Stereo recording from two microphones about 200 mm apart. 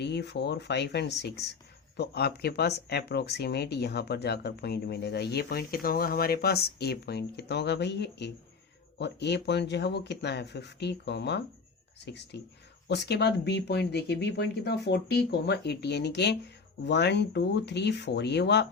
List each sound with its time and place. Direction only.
0.0 s speech: 55° left (ahead or behind)